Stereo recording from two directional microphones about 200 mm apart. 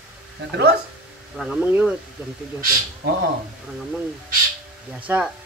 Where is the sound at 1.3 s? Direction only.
5° right (ahead or behind).